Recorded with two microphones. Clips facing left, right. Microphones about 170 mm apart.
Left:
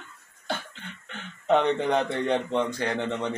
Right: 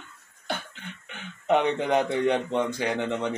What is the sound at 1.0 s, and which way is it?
A man's voice, 10° right (ahead or behind).